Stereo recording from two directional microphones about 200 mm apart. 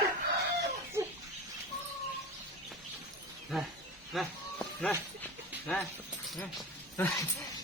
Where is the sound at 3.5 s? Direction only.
Centre (ahead or behind).